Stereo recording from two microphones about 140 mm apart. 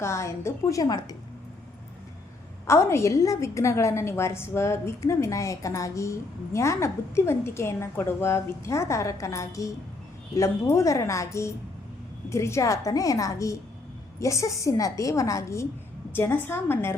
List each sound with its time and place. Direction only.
0.0 s a woman's voice: 20° left (ahead or behind)
2.6 s a woman's voice: 20° left (ahead or behind)